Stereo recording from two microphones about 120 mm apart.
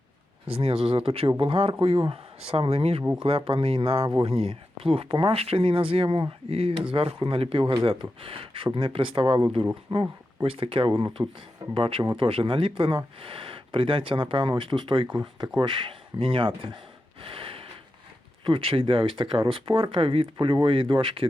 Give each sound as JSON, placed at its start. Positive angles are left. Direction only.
{"t": 0.5, "sound": "speech", "side_deg": -55}
{"t": 3.0, "sound": "speech", "side_deg": -10}
{"t": 3.2, "sound": "speech", "side_deg": -55}
{"t": 11.7, "sound": "speech", "side_deg": -50}
{"t": 17.2, "sound": "snort", "side_deg": -50}
{"t": 18.4, "sound": "speech", "side_deg": -45}